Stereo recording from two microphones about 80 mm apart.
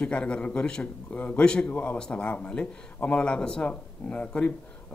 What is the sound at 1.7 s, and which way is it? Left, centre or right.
A man's voice, left.